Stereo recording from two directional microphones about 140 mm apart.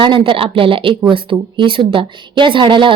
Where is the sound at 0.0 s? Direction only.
35° right (ahead or behind).